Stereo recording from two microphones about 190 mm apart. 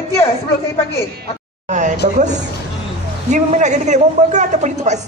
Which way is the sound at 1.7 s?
40° right (ahead or behind).